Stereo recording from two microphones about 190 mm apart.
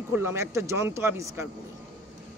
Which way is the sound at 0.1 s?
15° right (ahead or behind).